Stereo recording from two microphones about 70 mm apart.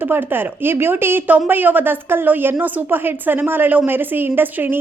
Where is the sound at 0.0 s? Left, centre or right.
Right.